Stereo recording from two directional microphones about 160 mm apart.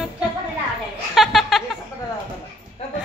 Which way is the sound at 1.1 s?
Centre (ahead or behind).